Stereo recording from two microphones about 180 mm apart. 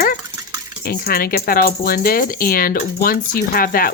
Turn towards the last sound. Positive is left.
turn(degrees=55)  # may be behind; listen again after turning